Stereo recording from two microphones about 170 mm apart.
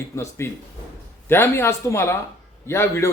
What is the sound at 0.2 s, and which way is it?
A man's voice, 15° left (ahead or behind).